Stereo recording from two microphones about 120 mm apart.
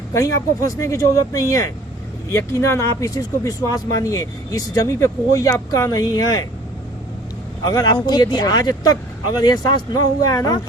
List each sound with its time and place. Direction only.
0.1 s speech: 25° left (ahead or behind)
7.6 s speech: 35° left (ahead or behind)